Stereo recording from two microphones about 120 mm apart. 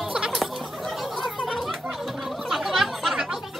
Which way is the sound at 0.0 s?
5° right (ahead or behind).